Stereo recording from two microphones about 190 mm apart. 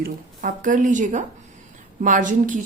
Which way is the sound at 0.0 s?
45° right (ahead or behind).